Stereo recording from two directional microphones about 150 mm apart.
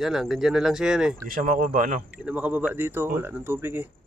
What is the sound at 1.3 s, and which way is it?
Speech, 70° right (ahead or behind).